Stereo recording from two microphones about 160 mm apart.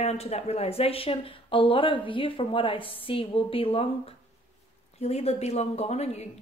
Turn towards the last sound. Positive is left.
turn(degrees=45)  # may be behind; listen again after turning